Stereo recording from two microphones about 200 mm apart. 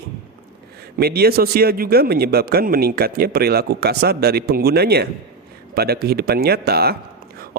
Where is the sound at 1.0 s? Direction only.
50° right (ahead or behind).